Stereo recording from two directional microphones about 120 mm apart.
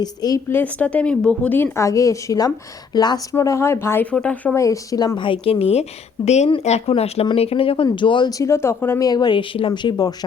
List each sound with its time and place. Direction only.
0.0 s speech: 30° left (ahead or behind)
0.4 s a woman's voice: 15° left (ahead or behind); by 3.2 s 35° left (ahead or behind)
3.3 s a woman's voice: 25° left (ahead or behind)
4.5 s a woman's voice: 25° left (ahead or behind); by 5.8 s 55° left (ahead or behind)
6.2 s a woman's voice: 70° left (ahead or behind); by 8.3 s 40° left (ahead or behind)
8.4 s speech: 20° left (ahead or behind)
9.0 s speech: 35° left (ahead or behind)